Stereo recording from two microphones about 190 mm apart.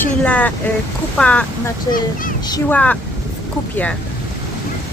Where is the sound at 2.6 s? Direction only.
10° left (ahead or behind).